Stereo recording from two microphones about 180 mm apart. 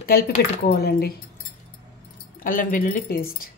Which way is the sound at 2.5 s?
45° left (ahead or behind).